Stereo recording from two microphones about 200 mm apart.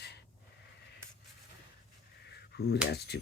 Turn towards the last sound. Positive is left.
turn(degrees=55)  # may be behind; listen again after turning